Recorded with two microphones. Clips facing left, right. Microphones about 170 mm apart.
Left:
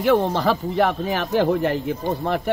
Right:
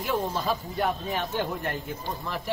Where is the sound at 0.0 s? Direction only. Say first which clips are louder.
Left 10 dB; 80° left.